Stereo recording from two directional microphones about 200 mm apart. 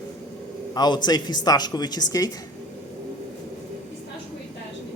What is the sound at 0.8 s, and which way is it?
A woman's voice, 20° left (ahead or behind).